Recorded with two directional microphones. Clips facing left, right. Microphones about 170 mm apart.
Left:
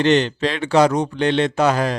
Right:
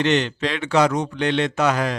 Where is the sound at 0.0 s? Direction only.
35° left (ahead or behind).